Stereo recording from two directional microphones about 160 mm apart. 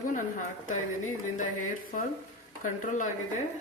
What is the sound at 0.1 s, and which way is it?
A woman's voice, 55° left (ahead or behind).